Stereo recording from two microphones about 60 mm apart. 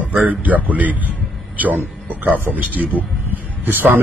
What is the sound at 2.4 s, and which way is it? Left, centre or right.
Speech, right.